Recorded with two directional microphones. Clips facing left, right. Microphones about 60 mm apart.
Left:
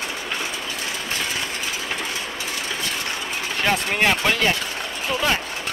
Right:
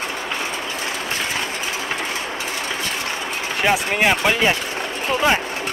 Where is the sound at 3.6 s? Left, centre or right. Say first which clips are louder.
Right 2 dB; centre.